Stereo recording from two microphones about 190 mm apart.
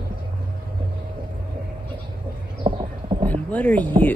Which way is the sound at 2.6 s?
25° right (ahead or behind).